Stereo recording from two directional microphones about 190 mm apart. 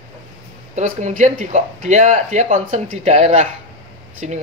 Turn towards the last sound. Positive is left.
turn(degrees=-40)  # may be behind; listen again after turning